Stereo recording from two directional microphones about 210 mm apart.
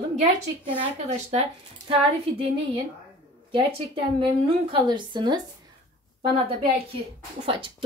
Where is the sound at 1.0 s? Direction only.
30° right (ahead or behind).